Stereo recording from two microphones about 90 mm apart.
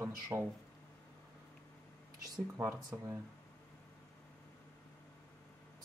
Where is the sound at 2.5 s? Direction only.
25° right (ahead or behind).